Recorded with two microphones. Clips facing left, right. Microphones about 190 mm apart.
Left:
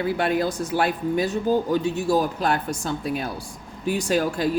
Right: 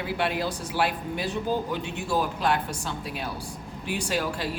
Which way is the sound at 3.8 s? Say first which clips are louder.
Left 6 dB; 45° left (ahead or behind).